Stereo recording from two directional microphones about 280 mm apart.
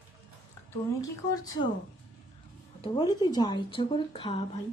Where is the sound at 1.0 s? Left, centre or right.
Centre.